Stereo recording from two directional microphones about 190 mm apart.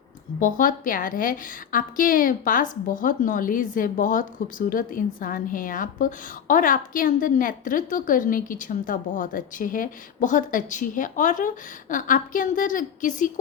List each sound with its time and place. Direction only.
0.3 s a woman's voice: 45° left (ahead or behind)